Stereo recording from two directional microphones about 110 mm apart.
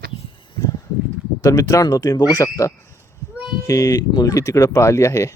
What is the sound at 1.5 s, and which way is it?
Speech, 30° left (ahead or behind).